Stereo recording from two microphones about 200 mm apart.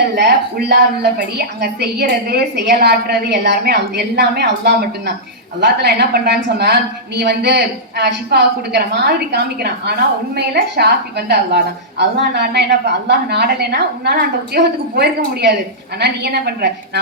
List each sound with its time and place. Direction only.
0.0 s a woman's voice: 55° right (ahead or behind)